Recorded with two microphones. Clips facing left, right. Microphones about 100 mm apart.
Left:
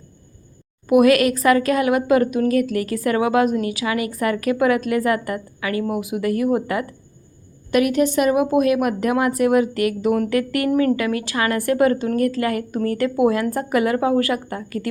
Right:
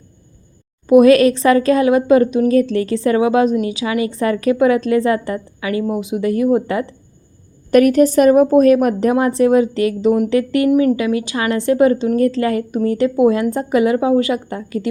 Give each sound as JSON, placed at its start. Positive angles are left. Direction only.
{"t": 0.9, "sound": "a woman's voice", "side_deg": -25}
{"t": 7.7, "sound": "a woman's voice", "side_deg": -45}